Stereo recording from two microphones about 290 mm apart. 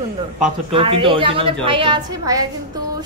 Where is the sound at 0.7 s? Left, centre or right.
Centre.